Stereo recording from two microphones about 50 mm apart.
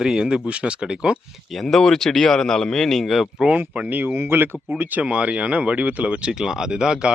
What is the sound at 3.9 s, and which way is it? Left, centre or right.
Speech, right.